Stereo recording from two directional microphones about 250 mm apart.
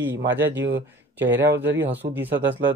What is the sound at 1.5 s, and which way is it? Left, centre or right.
Speech, centre.